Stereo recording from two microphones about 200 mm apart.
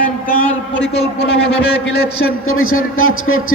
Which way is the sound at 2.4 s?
90° left.